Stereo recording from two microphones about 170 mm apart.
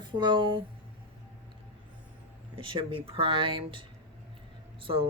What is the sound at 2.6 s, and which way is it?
Speech, 30° right (ahead or behind).